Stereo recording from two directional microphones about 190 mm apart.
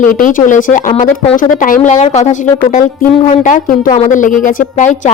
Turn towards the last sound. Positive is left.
turn(degrees=45)  # may be behind; listen again after turning